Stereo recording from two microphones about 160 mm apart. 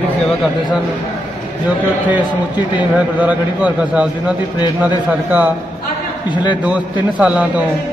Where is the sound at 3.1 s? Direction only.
10° right (ahead or behind).